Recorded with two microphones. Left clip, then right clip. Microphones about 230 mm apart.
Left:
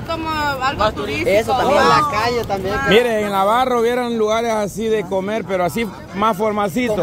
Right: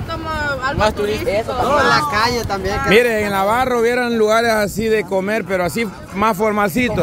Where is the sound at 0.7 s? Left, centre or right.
Right.